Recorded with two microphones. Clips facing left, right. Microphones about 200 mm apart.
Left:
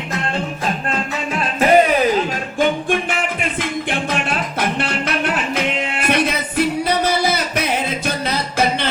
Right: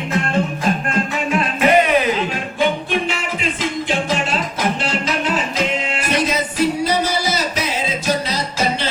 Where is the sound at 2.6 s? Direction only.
50° left (ahead or behind).